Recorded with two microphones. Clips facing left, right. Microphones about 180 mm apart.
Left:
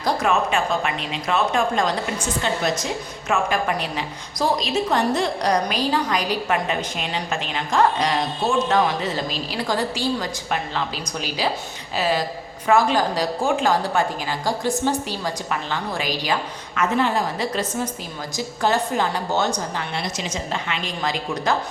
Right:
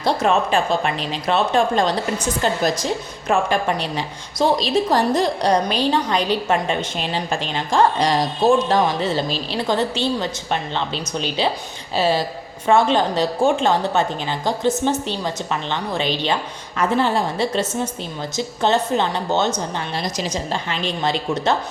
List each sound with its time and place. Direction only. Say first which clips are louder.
0.0 s a woman's voice: right 2 dB; 30° right (ahead or behind)
20.0 s speech: right 3 dB; 35° right (ahead or behind)